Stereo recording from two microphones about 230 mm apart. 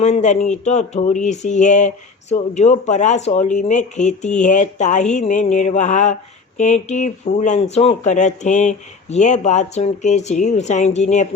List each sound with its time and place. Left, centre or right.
0.0 s speech: left